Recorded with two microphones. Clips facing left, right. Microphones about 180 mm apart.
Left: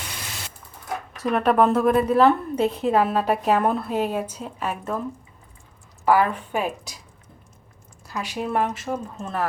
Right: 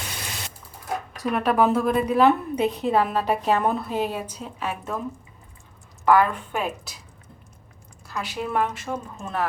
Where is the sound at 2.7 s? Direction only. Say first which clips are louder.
Left 2 dB; 5° left (ahead or behind).